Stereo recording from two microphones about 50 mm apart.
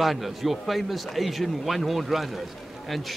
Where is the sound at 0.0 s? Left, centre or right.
Centre.